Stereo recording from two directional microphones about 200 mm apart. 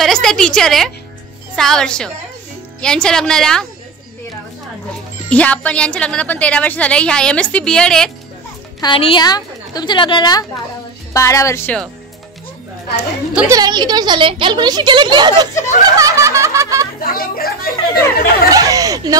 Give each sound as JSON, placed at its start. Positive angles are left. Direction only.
{"t": 0.0, "sound": "a woman's voice", "side_deg": 0}
{"t": 4.9, "sound": "speech", "side_deg": 5}
{"t": 8.8, "sound": "a woman's voice", "side_deg": 25}
{"t": 13.3, "sound": "fowl", "side_deg": -10}
{"t": 13.6, "sound": "a woman's voice", "side_deg": -20}
{"t": 15.8, "sound": "fowl", "side_deg": -15}
{"t": 17.0, "sound": "speech", "side_deg": 45}
{"t": 18.5, "sound": "fowl", "side_deg": -15}